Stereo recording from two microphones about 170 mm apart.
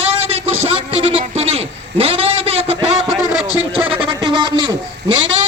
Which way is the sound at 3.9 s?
30° right (ahead or behind).